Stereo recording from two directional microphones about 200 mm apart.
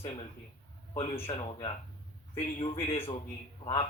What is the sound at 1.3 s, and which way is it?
A man's voice, 25° left (ahead or behind).